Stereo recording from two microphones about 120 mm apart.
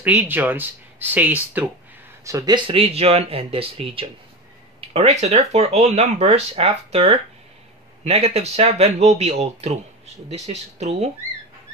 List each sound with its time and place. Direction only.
0.0 s speech: 15° right (ahead or behind)
2.2 s speech: 25° right (ahead or behind)
2.5 s speech: 45° right (ahead or behind); by 11.1 s 65° right (ahead or behind)